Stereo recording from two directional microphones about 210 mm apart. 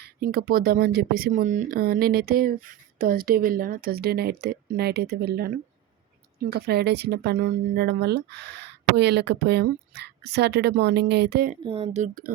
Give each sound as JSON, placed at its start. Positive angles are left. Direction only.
{"t": 0.0, "sound": "speech", "side_deg": -50}
{"t": 11.6, "sound": "speech", "side_deg": -25}